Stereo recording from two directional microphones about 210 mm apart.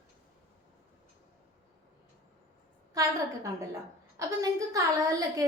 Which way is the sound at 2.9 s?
15° right (ahead or behind).